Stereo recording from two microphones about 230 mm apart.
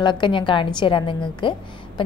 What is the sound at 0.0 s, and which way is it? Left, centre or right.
A woman's voice, left.